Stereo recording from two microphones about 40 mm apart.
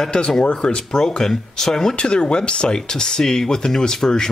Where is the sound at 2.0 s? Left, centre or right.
Left.